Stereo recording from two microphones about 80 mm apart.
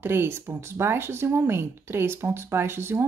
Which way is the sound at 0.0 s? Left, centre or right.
Right.